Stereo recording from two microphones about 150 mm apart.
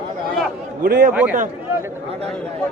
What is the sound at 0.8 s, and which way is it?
Speech, 80° right.